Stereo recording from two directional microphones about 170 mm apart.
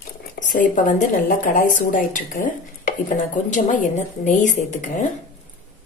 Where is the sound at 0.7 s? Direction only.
50° left (ahead or behind).